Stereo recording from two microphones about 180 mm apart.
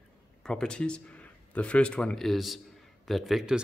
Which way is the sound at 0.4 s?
5° left (ahead or behind).